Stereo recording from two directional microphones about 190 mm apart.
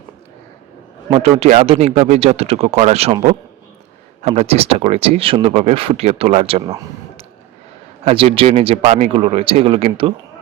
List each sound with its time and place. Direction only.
1.1 s speech: 30° right (ahead or behind)
8.0 s speech: 30° right (ahead or behind)